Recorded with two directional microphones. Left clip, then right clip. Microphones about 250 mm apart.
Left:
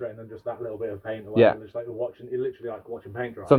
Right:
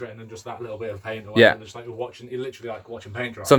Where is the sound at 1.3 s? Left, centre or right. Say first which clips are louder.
Right 3 dB; right.